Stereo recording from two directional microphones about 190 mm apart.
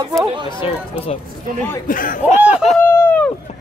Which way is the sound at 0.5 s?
25° left (ahead or behind).